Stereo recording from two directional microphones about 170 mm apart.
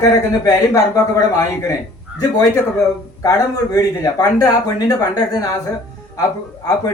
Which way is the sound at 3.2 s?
20° left (ahead or behind).